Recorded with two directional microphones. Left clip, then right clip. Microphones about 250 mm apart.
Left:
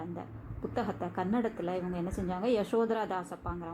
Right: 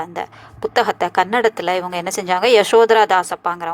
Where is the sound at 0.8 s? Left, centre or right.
Right.